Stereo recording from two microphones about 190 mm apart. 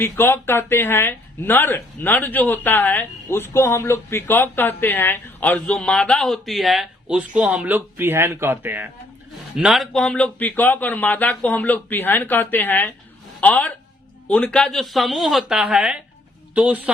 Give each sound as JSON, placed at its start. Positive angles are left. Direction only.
{"t": 0.0, "sound": "speech", "side_deg": 10}